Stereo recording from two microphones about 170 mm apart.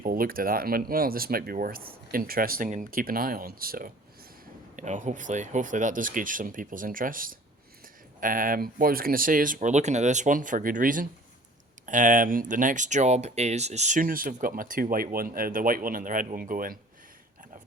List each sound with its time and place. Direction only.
0.0 s speech: 55° right (ahead or behind)
4.8 s speech: 45° right (ahead or behind)